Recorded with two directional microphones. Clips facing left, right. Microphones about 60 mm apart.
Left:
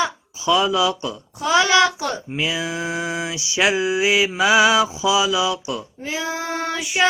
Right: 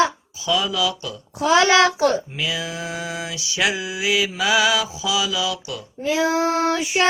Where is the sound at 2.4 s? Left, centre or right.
Left.